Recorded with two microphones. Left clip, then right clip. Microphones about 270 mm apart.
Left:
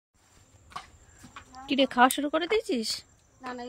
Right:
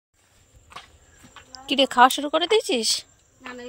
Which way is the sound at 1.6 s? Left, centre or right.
Centre.